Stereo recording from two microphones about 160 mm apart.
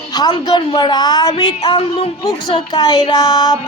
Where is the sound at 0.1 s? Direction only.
25° left (ahead or behind).